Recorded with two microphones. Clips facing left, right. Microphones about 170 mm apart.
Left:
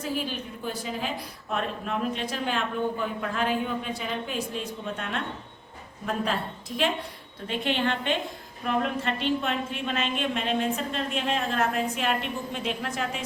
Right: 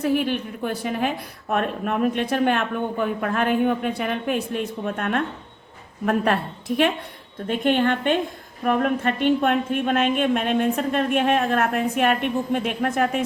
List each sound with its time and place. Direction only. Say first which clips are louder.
0.0 s a woman's voice: right 9 dB; 60° right (ahead or behind)
7.4 s a woman's voice: right 7 dB; 50° right (ahead or behind)